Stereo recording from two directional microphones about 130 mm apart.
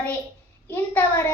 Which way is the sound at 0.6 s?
15° left (ahead or behind).